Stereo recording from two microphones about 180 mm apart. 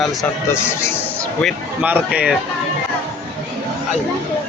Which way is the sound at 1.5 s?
5° right (ahead or behind).